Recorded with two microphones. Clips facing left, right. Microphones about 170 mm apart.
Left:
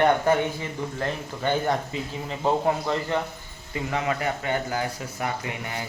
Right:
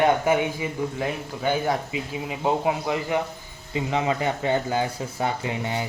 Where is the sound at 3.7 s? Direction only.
20° right (ahead or behind).